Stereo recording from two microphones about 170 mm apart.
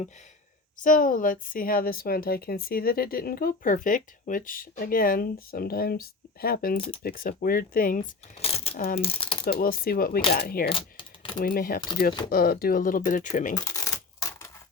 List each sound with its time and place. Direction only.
0.8 s a woman's voice: 55° left (ahead or behind)
8.4 s coin: 35° left (ahead or behind)
9.0 s speech: 35° left (ahead or behind)
9.6 s a woman's voice: 60° left (ahead or behind)
10.7 s typing: 30° left (ahead or behind)
11.3 s a woman's voice: 60° left (ahead or behind)
13.7 s typewriter: 20° left (ahead or behind)